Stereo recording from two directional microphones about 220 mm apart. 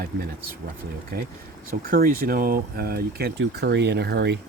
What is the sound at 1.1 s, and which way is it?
Speech, 45° right (ahead or behind).